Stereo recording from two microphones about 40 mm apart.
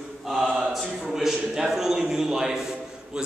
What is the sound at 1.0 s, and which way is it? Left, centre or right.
A man's voice, centre.